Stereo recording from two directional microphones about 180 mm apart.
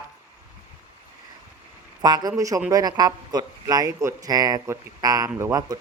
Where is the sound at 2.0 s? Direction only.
20° right (ahead or behind).